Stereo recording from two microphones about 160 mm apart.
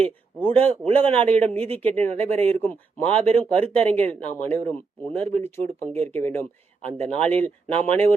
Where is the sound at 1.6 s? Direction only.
40° right (ahead or behind).